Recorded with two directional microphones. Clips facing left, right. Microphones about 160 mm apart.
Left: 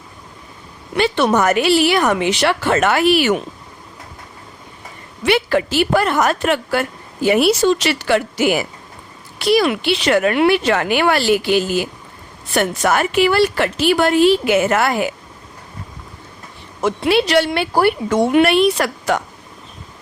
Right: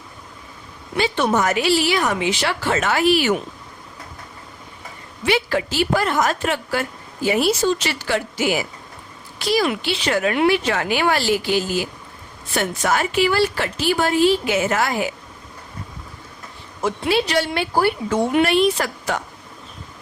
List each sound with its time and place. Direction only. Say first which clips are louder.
0.9 s a woman's voice: left 4 dB; 70° left (ahead or behind)
5.2 s a woman's voice: left 4 dB; 65° left (ahead or behind)
16.8 s a woman's voice: left 4 dB; 70° left (ahead or behind)